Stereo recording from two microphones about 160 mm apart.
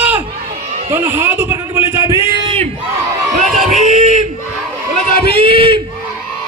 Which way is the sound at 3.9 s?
45° right (ahead or behind).